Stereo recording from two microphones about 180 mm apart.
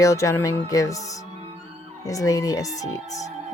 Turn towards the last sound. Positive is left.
turn(degrees=20)  # may be behind; listen again after turning